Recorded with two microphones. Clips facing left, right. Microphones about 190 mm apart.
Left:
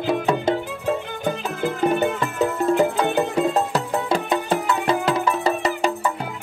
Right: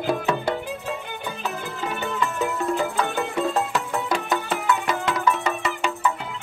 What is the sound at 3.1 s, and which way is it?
Music, 20° left (ahead or behind).